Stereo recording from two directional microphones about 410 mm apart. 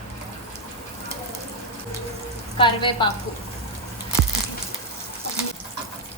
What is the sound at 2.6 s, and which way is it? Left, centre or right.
Speech, centre.